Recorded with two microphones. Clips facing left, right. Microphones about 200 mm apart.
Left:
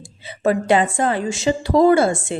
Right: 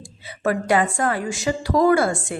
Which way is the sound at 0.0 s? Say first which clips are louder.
Left 4 dB; 25° left (ahead or behind).